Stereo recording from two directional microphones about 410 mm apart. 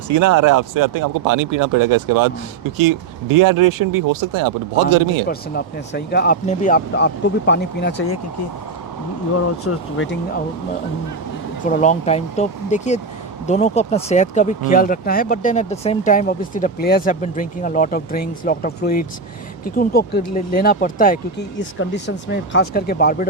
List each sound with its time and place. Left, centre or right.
0.1 s speech: right
5.3 s speech: left
9.7 s speech: left
11.6 s speech: centre